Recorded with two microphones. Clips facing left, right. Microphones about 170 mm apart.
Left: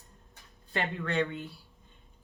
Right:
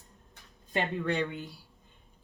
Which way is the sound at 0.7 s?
15° right (ahead or behind).